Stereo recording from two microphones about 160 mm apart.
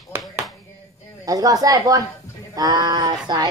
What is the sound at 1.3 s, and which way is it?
Speech, 20° right (ahead or behind).